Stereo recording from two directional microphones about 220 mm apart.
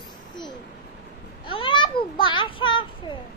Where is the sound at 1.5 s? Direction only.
25° left (ahead or behind).